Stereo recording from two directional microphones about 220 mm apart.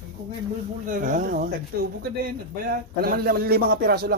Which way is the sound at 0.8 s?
35° right (ahead or behind).